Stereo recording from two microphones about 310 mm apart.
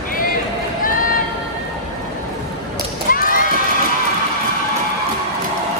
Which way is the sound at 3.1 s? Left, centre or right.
Left.